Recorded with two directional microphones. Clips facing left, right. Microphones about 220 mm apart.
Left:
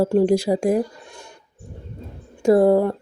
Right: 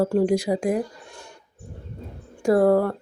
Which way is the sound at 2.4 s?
20° left (ahead or behind).